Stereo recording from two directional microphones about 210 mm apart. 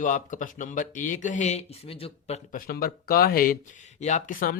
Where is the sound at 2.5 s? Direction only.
45° left (ahead or behind).